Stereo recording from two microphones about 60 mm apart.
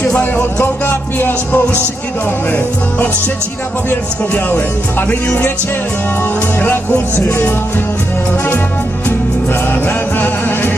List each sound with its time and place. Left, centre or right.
0.6 s music: left
4.4 s music: left
6.6 s music: left
9.8 s music: left